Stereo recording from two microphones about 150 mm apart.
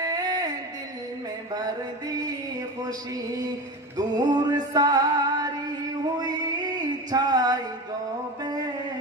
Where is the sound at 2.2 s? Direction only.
25° right (ahead or behind).